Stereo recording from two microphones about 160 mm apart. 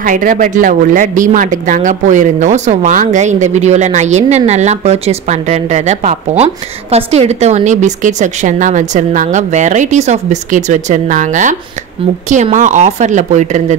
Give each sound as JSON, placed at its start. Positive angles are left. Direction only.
{"t": 0.0, "sound": "speech", "side_deg": -55}